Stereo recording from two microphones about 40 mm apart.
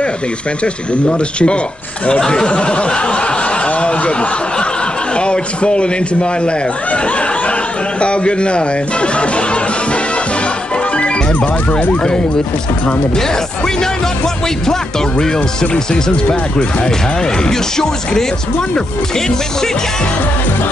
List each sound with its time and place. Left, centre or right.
1.0 s speech: left
8.0 s speech: left
14.7 s speech: left